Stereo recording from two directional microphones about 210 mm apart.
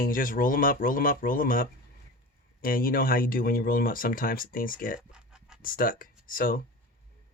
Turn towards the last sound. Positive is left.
turn(degrees=40)  # may be behind; listen again after turning